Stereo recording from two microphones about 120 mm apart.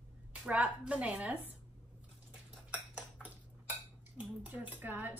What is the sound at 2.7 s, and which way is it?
Dishes, 15° right (ahead or behind).